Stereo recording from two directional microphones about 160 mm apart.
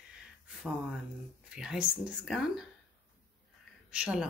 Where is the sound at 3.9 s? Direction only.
5° right (ahead or behind).